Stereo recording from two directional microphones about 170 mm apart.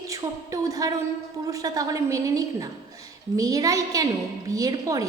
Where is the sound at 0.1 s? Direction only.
20° right (ahead or behind).